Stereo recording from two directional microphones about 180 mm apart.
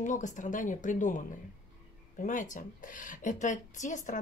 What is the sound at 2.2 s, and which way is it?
A woman's voice, 45° left (ahead or behind).